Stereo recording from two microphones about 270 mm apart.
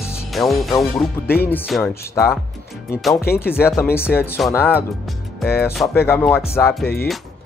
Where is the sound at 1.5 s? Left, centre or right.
Centre.